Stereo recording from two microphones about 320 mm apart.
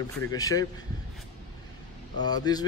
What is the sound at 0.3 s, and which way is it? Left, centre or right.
Speech, centre.